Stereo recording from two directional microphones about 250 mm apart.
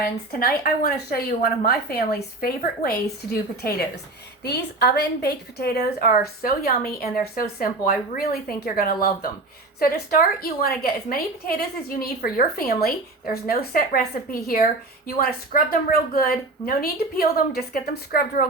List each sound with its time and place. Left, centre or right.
0.0 s a woman's voice: left